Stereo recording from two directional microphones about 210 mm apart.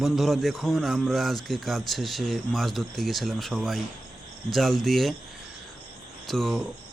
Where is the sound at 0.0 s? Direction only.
Centre (ahead or behind).